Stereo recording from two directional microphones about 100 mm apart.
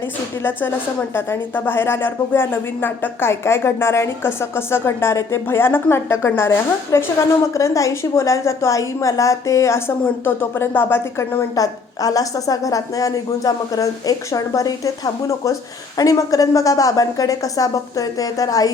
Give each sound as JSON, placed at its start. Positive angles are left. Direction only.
{"t": 1.1, "sound": "a woman's voice", "side_deg": 20}
{"t": 11.5, "sound": "a woman's voice", "side_deg": 35}